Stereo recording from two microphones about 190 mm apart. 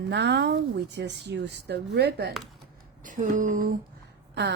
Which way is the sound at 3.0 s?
45° right (ahead or behind).